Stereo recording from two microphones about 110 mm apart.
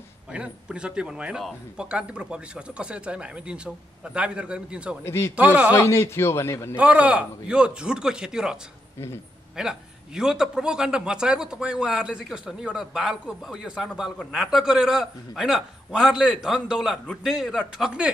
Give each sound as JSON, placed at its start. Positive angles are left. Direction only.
{"t": 0.3, "sound": "a man's voice", "side_deg": -10}
{"t": 5.0, "sound": "a man's voice", "side_deg": 25}
{"t": 5.3, "sound": "a man's voice", "side_deg": -10}
{"t": 5.7, "sound": "a man's voice", "side_deg": 25}
{"t": 6.8, "sound": "a man's voice", "side_deg": -10}
{"t": 9.6, "sound": "a man's voice", "side_deg": -5}